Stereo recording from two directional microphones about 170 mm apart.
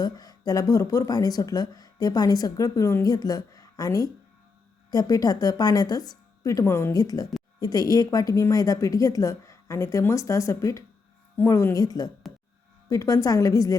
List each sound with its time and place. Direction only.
0.0 s a woman's voice: 25° left (ahead or behind)